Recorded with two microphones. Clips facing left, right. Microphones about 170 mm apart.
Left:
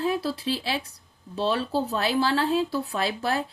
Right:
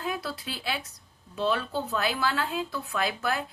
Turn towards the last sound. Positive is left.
turn(degrees=30)  # may be behind; listen again after turning